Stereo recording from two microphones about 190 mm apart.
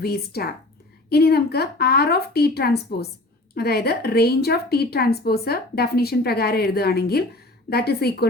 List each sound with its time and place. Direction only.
0.0 s a woman's voice: 55° left (ahead or behind)